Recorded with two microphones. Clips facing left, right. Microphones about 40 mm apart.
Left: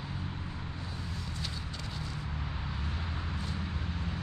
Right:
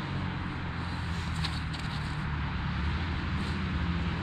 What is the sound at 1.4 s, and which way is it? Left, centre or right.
Vehicle, right.